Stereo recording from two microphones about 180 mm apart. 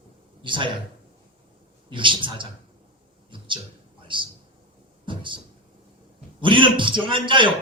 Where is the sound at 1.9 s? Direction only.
25° right (ahead or behind).